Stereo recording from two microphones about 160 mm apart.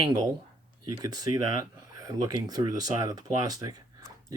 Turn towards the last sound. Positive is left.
turn(degrees=-25)  # may be behind; listen again after turning